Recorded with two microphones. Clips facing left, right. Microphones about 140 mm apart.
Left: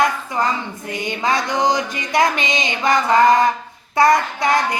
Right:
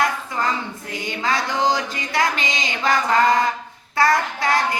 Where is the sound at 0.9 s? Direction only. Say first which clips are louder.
Left 4 dB; 20° left (ahead or behind).